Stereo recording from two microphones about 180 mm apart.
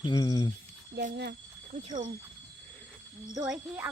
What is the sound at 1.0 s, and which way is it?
Speech, 65° right (ahead or behind).